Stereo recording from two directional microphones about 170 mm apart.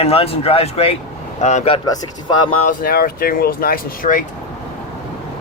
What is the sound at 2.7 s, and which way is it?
Speech, 60° left (ahead or behind).